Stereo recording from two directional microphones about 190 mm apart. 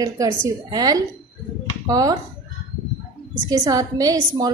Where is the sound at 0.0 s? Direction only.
20° right (ahead or behind).